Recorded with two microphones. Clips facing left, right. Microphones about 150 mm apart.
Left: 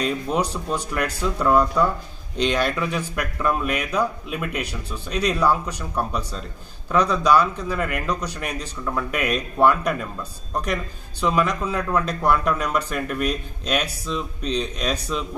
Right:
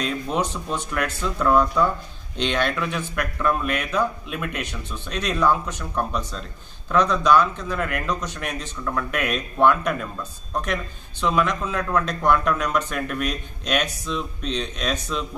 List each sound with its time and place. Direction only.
0.0 s speech: 5° left (ahead or behind)